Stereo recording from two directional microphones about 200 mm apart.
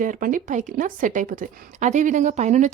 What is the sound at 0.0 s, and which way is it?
A woman's voice, 40° right (ahead or behind).